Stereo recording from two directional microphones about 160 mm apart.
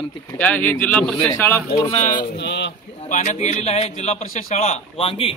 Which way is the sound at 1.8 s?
40° left (ahead or behind).